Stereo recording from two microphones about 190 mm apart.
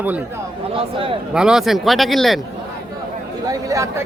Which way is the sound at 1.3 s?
5° right (ahead or behind).